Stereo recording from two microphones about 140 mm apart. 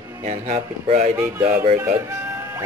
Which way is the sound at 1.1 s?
15° right (ahead or behind).